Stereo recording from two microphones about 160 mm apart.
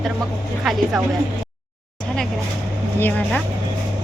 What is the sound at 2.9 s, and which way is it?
Speech, 10° left (ahead or behind).